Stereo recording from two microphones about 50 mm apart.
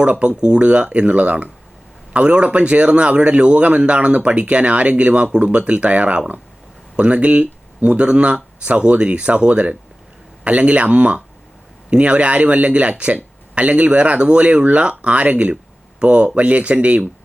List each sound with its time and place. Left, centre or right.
0.0 s speech: right